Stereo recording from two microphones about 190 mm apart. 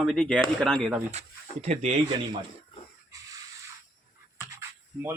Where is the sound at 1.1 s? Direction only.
35° right (ahead or behind).